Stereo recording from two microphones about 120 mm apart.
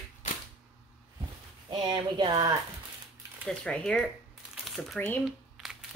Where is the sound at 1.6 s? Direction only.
40° right (ahead or behind).